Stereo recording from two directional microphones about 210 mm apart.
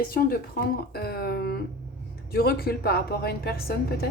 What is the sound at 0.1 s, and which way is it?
A woman's voice, 45° left (ahead or behind).